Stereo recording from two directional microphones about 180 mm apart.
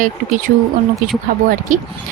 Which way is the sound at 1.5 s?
45° right (ahead or behind).